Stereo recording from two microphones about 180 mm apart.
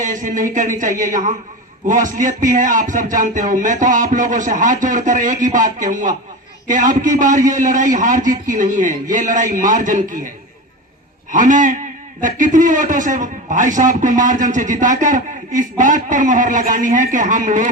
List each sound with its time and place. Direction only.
0.0 s a man's voice: 45° right (ahead or behind)